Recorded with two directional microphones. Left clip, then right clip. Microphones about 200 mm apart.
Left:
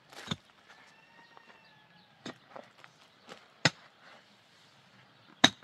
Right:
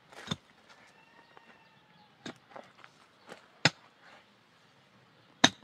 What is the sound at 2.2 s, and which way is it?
Walk, 10° left (ahead or behind).